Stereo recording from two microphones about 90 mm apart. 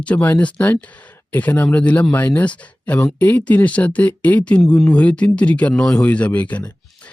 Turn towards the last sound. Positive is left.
turn(degrees=20)  # may be behind; listen again after turning